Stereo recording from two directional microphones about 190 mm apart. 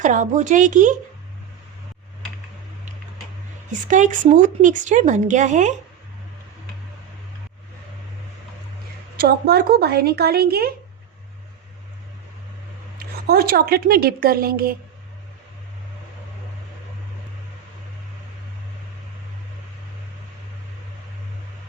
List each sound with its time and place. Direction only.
0.0 s speech: 40° right (ahead or behind)
3.7 s speech: 40° right (ahead or behind)
9.1 s speech: 55° right (ahead or behind)
13.0 s a woman's voice: 50° right (ahead or behind)